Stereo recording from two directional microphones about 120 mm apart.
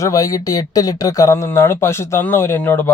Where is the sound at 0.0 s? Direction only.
30° left (ahead or behind).